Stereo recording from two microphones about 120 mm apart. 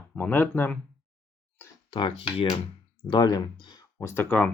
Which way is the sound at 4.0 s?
20° left (ahead or behind).